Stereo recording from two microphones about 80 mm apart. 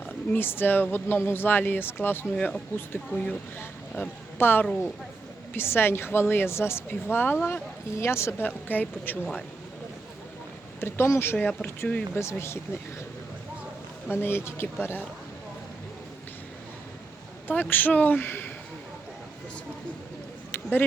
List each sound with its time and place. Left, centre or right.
0.0 s a woman's voice: left
2.3 s speech: centre
3.6 s a woman's voice: left
10.8 s speech: left
14.1 s a woman's voice: left
17.5 s a woman's voice: left
20.5 s a sound: left